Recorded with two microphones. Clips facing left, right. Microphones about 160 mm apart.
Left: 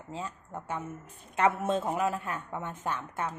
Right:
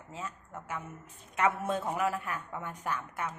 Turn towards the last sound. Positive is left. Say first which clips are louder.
# left 2 dB
turn(degrees=25)  # may be behind; listen again after turning